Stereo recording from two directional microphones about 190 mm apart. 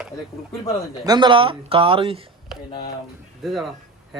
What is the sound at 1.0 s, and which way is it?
Speech, 20° right (ahead or behind).